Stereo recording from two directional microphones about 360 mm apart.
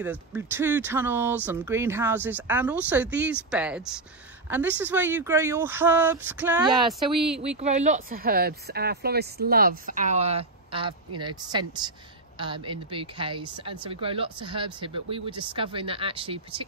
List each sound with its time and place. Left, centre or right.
0.0 s speech: centre
7.6 s speech: centre